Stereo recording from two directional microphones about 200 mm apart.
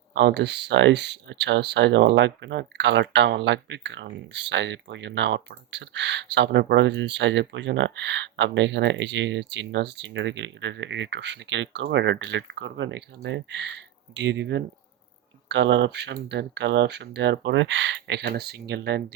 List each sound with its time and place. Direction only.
0.1 s speech: 60° right (ahead or behind)